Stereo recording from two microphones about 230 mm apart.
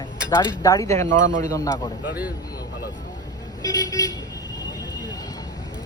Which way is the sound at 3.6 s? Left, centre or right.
Centre.